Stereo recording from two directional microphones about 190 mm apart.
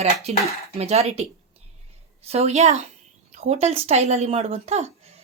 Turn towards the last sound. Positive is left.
turn(degrees=-35)  # may be behind; listen again after turning